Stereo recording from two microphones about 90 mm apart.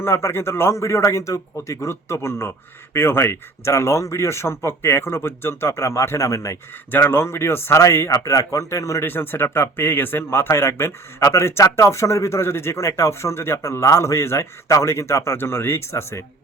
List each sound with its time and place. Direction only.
0.0 s speech: 30° left (ahead or behind)
6.9 s speech: 25° left (ahead or behind)